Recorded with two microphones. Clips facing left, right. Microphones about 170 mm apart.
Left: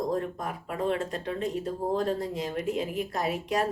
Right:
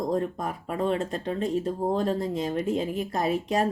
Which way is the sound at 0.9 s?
30° right (ahead or behind).